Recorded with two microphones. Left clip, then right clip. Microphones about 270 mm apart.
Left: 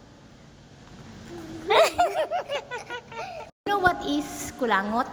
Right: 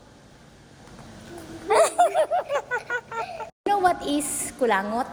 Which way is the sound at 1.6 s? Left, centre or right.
Centre.